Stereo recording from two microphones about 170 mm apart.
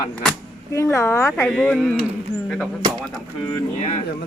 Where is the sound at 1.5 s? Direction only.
5° left (ahead or behind).